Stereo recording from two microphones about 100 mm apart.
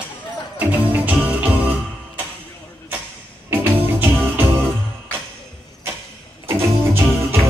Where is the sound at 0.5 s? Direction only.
15° right (ahead or behind).